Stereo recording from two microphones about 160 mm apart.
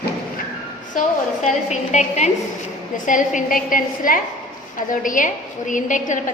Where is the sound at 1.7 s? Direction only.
45° left (ahead or behind).